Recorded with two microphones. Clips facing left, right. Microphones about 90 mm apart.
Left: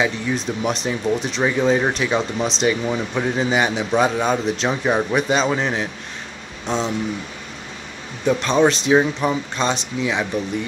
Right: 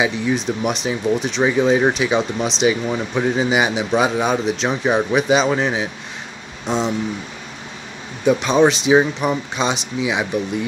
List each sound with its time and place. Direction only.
0.0 s speech: 5° right (ahead or behind)
8.3 s speech: 10° right (ahead or behind)